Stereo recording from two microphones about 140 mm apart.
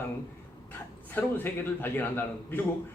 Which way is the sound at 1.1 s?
15° left (ahead or behind).